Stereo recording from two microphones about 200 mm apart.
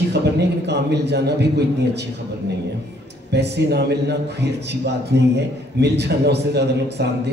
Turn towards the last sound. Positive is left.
turn(degrees=-55)  # may be behind; listen again after turning